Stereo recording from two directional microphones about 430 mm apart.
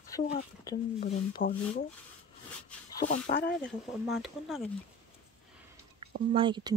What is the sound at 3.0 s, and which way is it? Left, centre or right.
Speech, centre.